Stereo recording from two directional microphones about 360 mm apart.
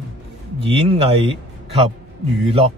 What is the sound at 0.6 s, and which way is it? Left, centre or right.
A man's voice, centre.